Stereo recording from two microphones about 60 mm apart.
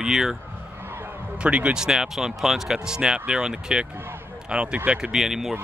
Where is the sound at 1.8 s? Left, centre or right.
Centre.